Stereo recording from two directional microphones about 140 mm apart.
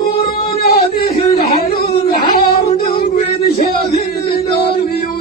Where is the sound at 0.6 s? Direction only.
90° left.